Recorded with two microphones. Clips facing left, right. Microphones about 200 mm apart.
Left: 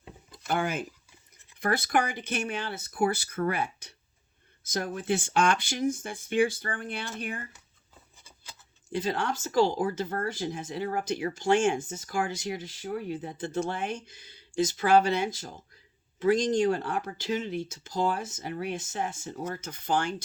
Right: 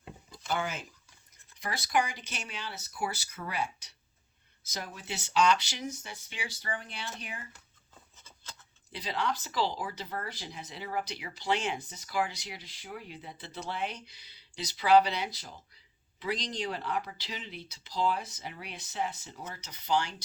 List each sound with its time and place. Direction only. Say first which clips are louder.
0.3 s a sound: left 4 dB; 55° left (ahead or behind)
1.5 s speech: left 4 dB; 55° left (ahead or behind)
8.9 s speech: left 4 dB; 50° left (ahead or behind)